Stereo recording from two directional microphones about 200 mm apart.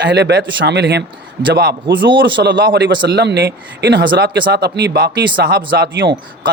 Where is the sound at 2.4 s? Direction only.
55° right (ahead or behind).